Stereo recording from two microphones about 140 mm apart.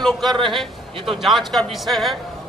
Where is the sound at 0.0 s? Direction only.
Centre (ahead or behind).